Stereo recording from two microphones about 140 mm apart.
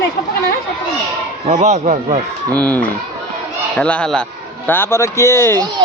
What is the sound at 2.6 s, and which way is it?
A man's voice, 10° left (ahead or behind).